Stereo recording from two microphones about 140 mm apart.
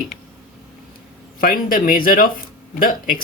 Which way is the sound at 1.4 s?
90° left.